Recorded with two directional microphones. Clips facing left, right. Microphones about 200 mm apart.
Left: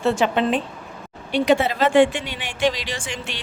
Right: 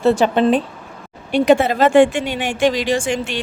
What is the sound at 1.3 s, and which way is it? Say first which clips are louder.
A woman's voice: right 5 dB; 50° right (ahead or behind).